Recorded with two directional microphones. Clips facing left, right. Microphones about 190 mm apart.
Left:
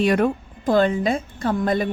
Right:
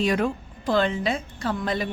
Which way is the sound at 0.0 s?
60° left (ahead or behind).